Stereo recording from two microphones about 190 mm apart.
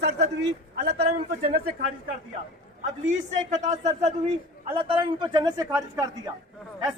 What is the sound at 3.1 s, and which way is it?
Speech, 40° right (ahead or behind).